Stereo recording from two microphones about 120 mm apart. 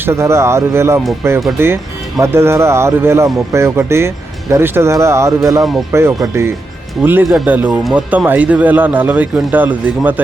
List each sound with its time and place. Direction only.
0.0 s speech: 20° right (ahead or behind)